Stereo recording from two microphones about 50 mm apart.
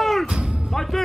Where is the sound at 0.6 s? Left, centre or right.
Centre.